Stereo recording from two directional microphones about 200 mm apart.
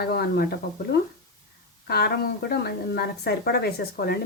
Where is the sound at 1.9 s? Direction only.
55° left (ahead or behind).